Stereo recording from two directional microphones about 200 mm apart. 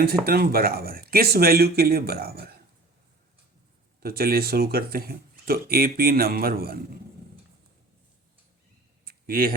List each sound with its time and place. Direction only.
0.0 s speech: 50° right (ahead or behind)
4.0 s speech: 50° right (ahead or behind)
9.0 s a sound: 50° right (ahead or behind)